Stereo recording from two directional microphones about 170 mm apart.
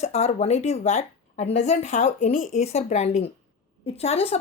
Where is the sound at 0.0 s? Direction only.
40° left (ahead or behind).